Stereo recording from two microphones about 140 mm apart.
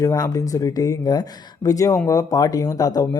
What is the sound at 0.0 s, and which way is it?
Speech, 25° left (ahead or behind).